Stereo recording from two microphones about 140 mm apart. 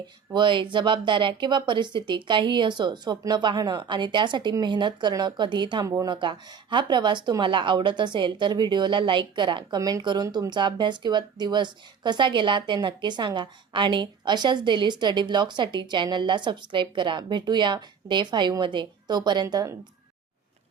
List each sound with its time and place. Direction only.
0.3 s speech: 35° right (ahead or behind)